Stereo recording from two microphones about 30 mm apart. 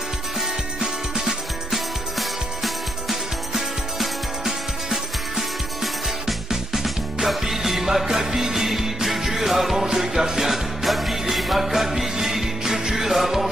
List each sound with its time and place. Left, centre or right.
1.7 s music: centre